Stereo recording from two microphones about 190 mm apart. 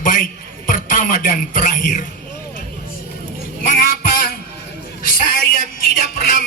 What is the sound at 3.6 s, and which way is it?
Music, 50° left (ahead or behind).